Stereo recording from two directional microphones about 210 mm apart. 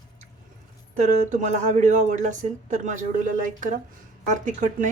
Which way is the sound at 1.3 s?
35° right (ahead or behind).